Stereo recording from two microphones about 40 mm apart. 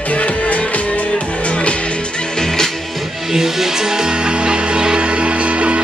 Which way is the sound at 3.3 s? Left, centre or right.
Centre.